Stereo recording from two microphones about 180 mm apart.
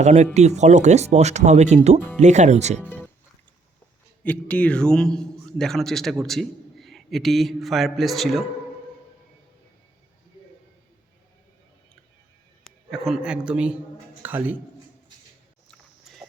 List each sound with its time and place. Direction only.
0.0 s speech: 40° right (ahead or behind)
4.2 s a man's voice: 10° left (ahead or behind)
12.6 s a man's voice: centre (ahead or behind)
15.7 s a sound: centre (ahead or behind)